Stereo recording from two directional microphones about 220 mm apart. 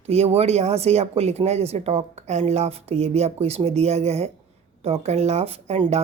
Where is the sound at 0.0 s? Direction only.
25° right (ahead or behind).